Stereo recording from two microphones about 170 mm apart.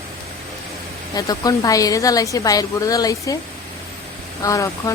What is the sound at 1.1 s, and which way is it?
A woman's voice, 20° left (ahead or behind).